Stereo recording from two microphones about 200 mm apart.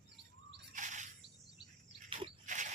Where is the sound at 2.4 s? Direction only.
40° right (ahead or behind).